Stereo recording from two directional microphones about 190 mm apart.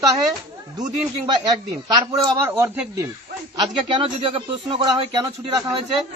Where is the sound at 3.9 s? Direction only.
30° right (ahead or behind).